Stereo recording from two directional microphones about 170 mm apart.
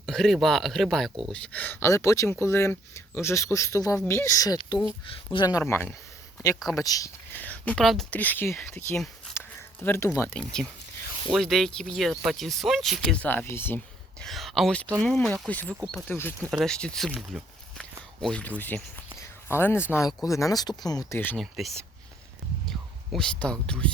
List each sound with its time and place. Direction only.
0.0 s speech: centre (ahead or behind); by 7.1 s 20° left (ahead or behind)
7.3 s speech: 10° left (ahead or behind)
10.2 s speech: 5° left (ahead or behind)
16.5 s speech: centre (ahead or behind); by 21.2 s 20° left (ahead or behind)
21.2 s speech: 10° left (ahead or behind)
21.4 s speech: centre (ahead or behind)
23.1 s speech: 5° left (ahead or behind)